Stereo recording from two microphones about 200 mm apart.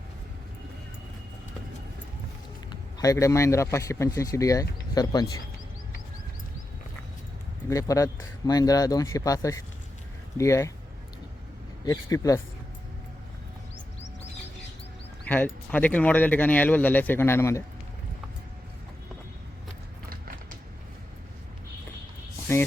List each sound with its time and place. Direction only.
2.6 s a man's voice: 15° left (ahead or behind)
7.7 s speech: 15° left (ahead or behind)
11.9 s speech: 15° left (ahead or behind)
15.3 s speech: 10° left (ahead or behind)
20.1 s music: 45° right (ahead or behind)